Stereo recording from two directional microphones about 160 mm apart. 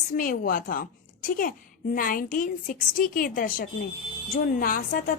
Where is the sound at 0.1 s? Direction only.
60° left (ahead or behind).